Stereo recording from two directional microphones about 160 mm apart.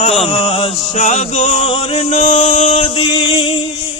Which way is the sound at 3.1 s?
35° left (ahead or behind).